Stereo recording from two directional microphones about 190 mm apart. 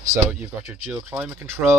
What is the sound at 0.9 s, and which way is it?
Speech, 10° right (ahead or behind).